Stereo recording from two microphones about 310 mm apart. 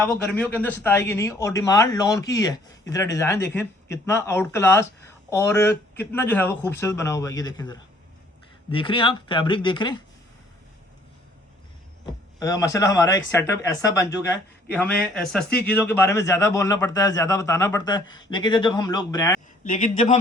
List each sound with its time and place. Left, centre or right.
0.0 s speech: centre
12.4 s speech: centre
19.6 s speech: left